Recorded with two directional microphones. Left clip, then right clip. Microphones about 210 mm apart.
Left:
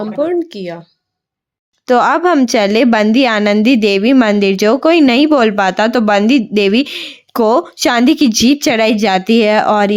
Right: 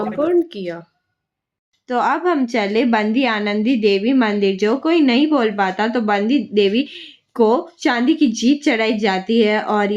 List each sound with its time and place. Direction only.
0.2 s speech: 20° left (ahead or behind)
1.9 s a woman's voice: 55° left (ahead or behind)